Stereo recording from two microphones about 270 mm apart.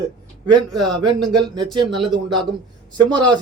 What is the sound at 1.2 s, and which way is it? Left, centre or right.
A man's voice, centre.